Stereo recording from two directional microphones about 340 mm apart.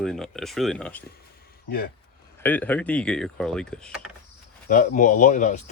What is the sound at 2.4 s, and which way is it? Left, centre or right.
Speech, centre.